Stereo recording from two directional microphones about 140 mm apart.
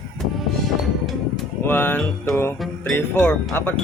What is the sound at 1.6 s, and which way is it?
Speech, 15° left (ahead or behind).